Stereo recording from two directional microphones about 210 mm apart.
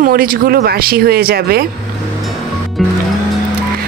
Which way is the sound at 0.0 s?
45° right (ahead or behind).